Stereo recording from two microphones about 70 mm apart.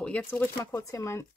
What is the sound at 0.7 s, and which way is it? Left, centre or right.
Speech, left.